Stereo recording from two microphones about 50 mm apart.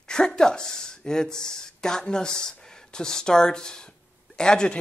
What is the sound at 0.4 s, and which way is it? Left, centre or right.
Speech, centre.